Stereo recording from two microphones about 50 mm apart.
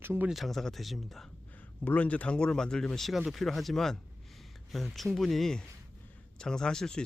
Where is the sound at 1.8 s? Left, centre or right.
Left; by 3.1 s centre.